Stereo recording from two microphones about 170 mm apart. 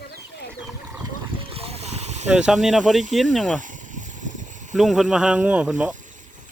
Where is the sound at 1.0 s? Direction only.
35° right (ahead or behind).